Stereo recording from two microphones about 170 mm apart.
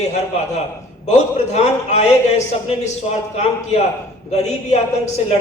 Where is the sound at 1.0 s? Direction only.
40° left (ahead or behind).